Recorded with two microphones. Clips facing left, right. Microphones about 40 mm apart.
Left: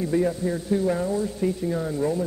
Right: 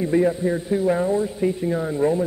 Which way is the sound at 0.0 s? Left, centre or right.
Right.